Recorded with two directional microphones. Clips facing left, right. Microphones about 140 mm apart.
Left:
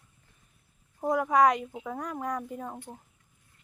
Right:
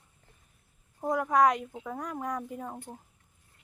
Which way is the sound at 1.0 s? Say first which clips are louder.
Left 1 dB; 5° left (ahead or behind).